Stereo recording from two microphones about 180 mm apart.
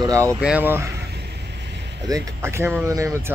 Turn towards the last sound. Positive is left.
turn(degrees=-15)  # may be behind; listen again after turning